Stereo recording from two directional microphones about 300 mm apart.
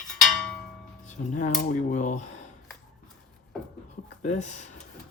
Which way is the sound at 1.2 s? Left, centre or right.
Left.